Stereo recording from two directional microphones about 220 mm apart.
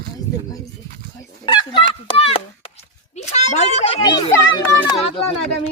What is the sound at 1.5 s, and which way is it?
Fowl, 20° left (ahead or behind).